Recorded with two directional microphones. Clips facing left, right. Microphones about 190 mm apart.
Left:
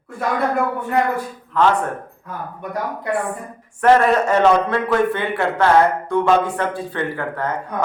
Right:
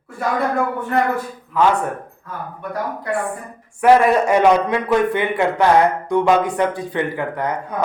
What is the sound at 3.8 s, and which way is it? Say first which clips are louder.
A man's voice: right 1 dB; 10° right (ahead or behind).